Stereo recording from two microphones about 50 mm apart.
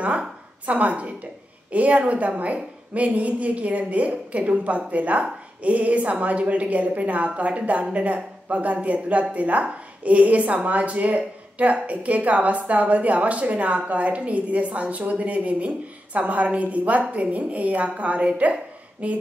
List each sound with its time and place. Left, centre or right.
0.0 s a woman's voice: right